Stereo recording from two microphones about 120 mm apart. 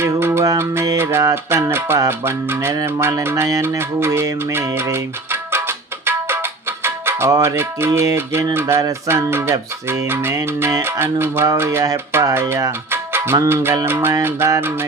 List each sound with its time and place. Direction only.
0.0 s music: 20° right (ahead or behind)